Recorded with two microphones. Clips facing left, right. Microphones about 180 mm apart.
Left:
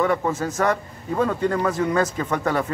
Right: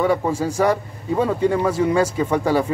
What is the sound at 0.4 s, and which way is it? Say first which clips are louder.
A man's voice: right 3 dB; 10° right (ahead or behind).